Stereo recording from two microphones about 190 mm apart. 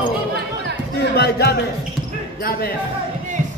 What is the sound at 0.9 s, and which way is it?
A man's voice, 55° left (ahead or behind).